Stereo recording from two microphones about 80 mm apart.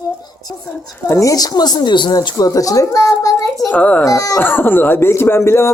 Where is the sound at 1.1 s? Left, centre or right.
Left.